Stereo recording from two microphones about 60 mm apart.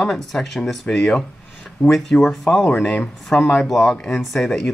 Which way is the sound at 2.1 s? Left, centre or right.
Centre.